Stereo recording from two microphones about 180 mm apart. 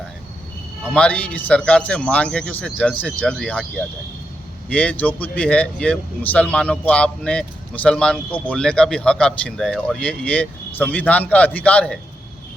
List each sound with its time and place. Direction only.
0.9 s speech: 5° left (ahead or behind)
4.7 s speech: 10° left (ahead or behind)